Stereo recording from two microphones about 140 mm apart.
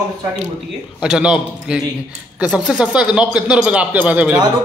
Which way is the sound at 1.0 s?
5° right (ahead or behind).